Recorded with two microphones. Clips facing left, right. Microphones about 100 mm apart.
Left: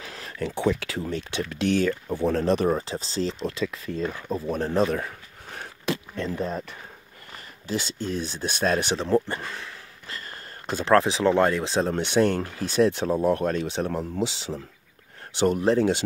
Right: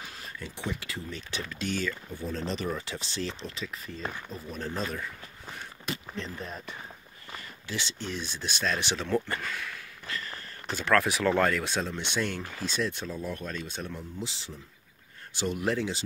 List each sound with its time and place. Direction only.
0.1 s a sound: 85° left
0.7 s speech: 85° left; by 2.7 s 55° left (ahead or behind)
2.7 s speech: 35° left (ahead or behind)
3.4 s speech: 65° left (ahead or behind)
7.6 s speech: 40° left (ahead or behind)
8.9 s speech: 30° left (ahead or behind)
11.9 s speech: 50° left (ahead or behind); by 14.6 s 90° left
15.3 s speech: 55° left (ahead or behind)